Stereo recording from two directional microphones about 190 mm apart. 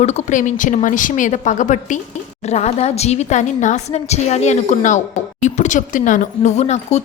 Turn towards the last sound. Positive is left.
turn(degrees=35)  # may be behind; listen again after turning